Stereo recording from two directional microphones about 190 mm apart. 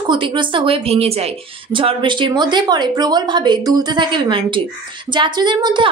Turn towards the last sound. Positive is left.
turn(degrees=-25)  # may be behind; listen again after turning